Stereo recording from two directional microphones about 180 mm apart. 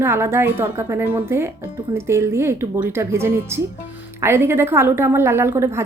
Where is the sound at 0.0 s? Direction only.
15° right (ahead or behind).